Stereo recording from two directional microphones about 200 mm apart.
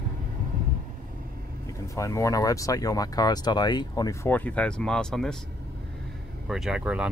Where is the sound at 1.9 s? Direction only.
15° left (ahead or behind).